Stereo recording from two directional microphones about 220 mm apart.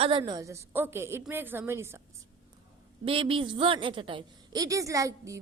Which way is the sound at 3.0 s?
25° right (ahead or behind).